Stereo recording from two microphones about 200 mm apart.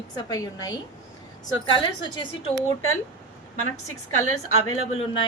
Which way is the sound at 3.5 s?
90° left.